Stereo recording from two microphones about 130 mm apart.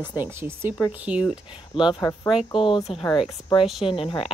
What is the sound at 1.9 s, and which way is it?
Speech, 30° left (ahead or behind).